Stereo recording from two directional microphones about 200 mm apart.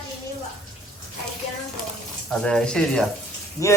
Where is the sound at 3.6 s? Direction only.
15° left (ahead or behind).